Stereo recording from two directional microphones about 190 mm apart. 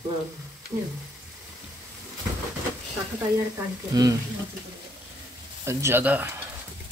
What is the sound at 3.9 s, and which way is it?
Speech, 20° right (ahead or behind).